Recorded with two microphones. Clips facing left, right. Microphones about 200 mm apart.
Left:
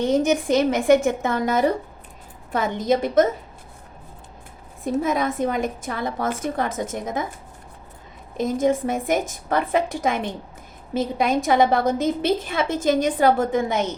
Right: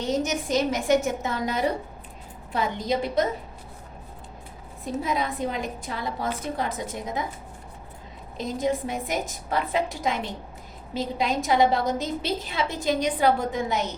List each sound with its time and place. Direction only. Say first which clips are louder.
0.0 s a woman's voice: left 7 dB; 55° left (ahead or behind)
5.0 s a woman's voice: left 3 dB; 50° left (ahead or behind)
8.4 s a woman's voice: left 6 dB; 50° left (ahead or behind)